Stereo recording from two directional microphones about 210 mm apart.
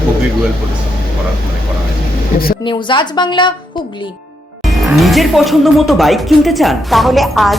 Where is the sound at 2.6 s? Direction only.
20° left (ahead or behind).